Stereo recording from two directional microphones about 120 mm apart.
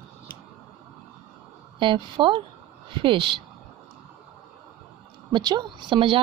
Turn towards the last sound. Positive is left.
turn(degrees=-45)  # may be behind; listen again after turning